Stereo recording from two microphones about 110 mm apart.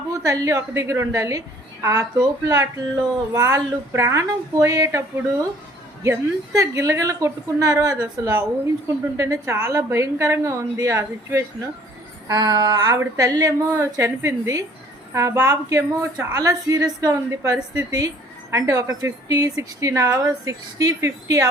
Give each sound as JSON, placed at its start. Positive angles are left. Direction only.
{"t": 0.1, "sound": "a woman's voice", "side_deg": -30}
{"t": 12.3, "sound": "a woman's voice", "side_deg": -35}